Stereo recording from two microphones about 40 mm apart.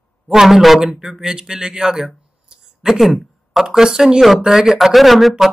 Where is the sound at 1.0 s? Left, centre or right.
Centre.